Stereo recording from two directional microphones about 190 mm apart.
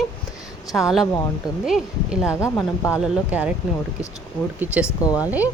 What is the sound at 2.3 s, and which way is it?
Speech, 15° left (ahead or behind).